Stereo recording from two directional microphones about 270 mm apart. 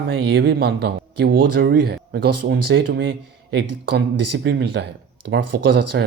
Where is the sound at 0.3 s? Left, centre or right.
Right.